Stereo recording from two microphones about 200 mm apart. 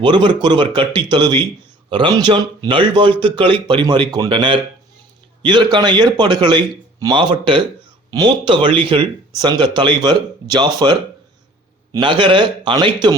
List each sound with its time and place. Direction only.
0.0 s speech: 25° right (ahead or behind)